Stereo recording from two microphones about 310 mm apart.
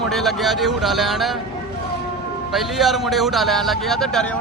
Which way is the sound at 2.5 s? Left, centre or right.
Centre.